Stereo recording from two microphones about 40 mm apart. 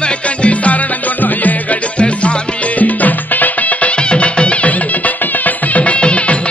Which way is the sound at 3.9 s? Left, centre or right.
Left.